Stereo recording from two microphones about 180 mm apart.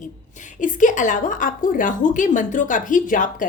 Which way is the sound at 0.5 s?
45° left (ahead or behind).